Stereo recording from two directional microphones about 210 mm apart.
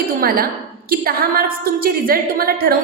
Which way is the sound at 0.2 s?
45° right (ahead or behind).